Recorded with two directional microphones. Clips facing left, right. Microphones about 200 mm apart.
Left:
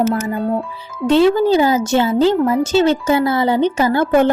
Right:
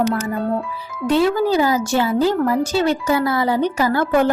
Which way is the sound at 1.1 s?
25° left (ahead or behind).